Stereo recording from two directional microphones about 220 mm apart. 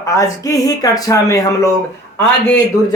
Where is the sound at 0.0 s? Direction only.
15° left (ahead or behind).